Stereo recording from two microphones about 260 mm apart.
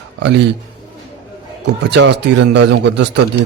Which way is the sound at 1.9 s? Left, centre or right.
Right.